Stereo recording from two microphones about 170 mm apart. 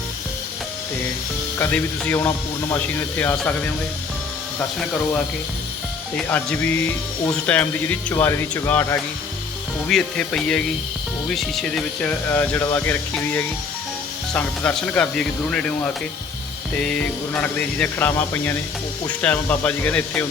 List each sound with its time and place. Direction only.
1.5 s speech: 10° left (ahead or behind)
6.1 s speech: 10° left (ahead or behind)
9.9 s speech: 5° left (ahead or behind)
16.8 s speech: 5° left (ahead or behind)